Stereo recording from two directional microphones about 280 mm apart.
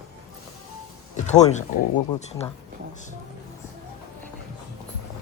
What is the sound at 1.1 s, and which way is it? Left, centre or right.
Speech, left.